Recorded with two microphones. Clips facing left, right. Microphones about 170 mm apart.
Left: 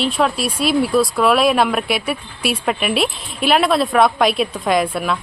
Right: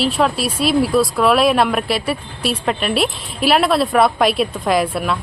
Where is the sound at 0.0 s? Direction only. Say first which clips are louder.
Right 1 dB; centre (ahead or behind).